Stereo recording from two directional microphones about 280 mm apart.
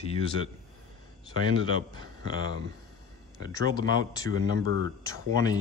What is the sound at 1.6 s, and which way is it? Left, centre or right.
Speech, centre.